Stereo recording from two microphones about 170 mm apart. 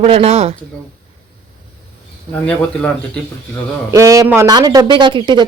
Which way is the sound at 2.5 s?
10° left (ahead or behind).